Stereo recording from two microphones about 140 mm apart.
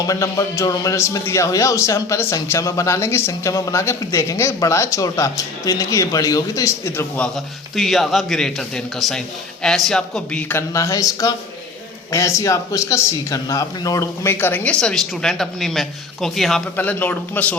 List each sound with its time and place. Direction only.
0.0 s a man's voice: 25° left (ahead or behind)
7.2 s a man's voice: centre (ahead or behind)
10.5 s a man's voice: 20° left (ahead or behind); by 16.6 s centre (ahead or behind)
16.7 s speech: 15° left (ahead or behind)